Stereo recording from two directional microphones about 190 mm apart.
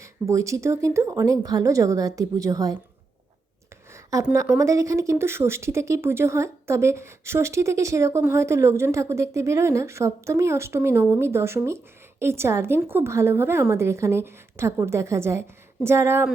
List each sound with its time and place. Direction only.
0.0 s a woman's voice: 15° right (ahead or behind)
3.9 s a woman's voice: 15° right (ahead or behind)